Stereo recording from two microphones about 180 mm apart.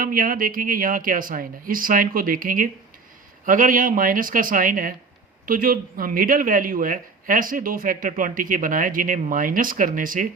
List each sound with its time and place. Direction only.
0.0 s a man's voice: 50° right (ahead or behind)